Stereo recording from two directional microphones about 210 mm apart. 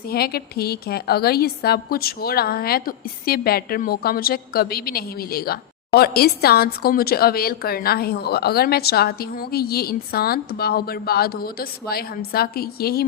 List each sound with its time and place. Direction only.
0.1 s a woman's voice: 45° left (ahead or behind)